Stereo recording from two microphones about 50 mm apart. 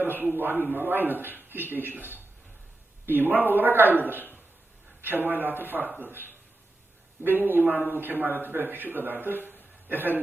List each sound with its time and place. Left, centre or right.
0.0 s a man's voice: right
3.1 s speech: right